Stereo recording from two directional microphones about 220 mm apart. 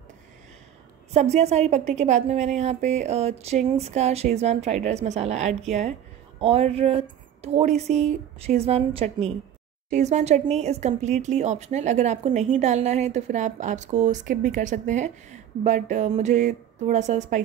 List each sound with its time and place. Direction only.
1.1 s speech: 30° right (ahead or behind)